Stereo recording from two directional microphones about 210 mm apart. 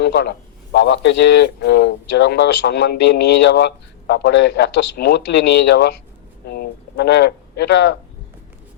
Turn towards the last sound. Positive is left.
turn(degrees=55)  # may be behind; listen again after turning